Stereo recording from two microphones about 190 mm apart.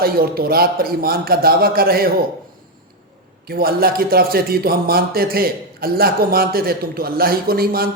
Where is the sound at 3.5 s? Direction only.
50° right (ahead or behind).